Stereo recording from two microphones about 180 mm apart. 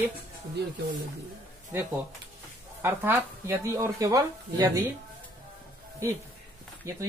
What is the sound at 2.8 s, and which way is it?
Speech, 15° right (ahead or behind).